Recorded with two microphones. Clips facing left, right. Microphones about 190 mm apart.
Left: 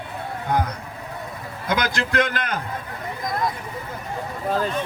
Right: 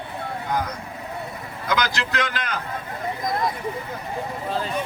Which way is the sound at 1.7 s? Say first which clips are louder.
Left 1 dB; 50° left (ahead or behind).